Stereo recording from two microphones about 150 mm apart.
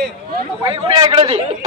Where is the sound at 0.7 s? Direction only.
35° right (ahead or behind).